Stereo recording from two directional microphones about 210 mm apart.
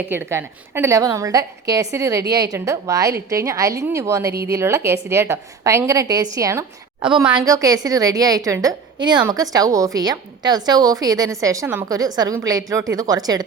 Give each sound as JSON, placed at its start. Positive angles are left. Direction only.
{"t": 0.1, "sound": "a woman's voice", "side_deg": -10}